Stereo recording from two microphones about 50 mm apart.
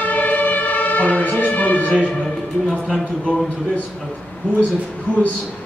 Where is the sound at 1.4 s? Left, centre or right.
Left.